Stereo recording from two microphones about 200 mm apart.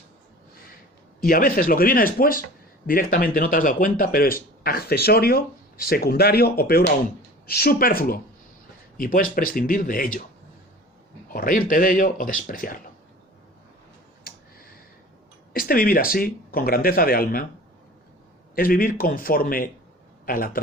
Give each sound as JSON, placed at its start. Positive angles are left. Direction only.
{"t": 1.2, "sound": "speech", "side_deg": 45}
{"t": 11.3, "sound": "speech", "side_deg": 45}
{"t": 14.3, "sound": "a sound", "side_deg": 45}
{"t": 15.5, "sound": "speech", "side_deg": 45}
{"t": 18.5, "sound": "speech", "side_deg": 45}